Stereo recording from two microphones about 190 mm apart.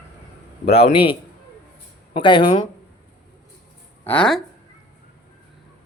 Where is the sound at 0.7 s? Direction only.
30° left (ahead or behind).